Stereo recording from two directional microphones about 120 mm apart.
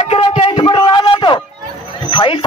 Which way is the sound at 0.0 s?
60° left (ahead or behind).